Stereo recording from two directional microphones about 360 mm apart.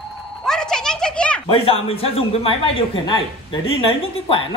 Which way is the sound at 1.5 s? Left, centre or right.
Centre.